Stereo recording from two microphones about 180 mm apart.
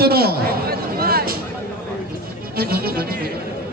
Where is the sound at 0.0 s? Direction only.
60° right (ahead or behind).